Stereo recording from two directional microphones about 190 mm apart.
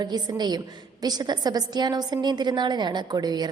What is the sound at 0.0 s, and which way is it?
A woman's voice, 20° right (ahead or behind).